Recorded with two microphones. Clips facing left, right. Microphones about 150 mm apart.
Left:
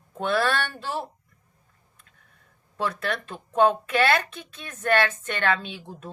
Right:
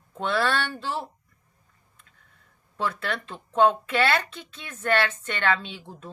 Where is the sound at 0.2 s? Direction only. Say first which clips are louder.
Left 1 dB; 45° left (ahead or behind).